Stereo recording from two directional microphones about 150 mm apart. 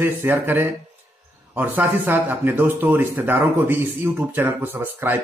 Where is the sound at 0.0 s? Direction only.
15° right (ahead or behind).